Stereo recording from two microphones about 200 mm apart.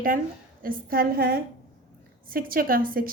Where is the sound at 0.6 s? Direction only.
45° right (ahead or behind).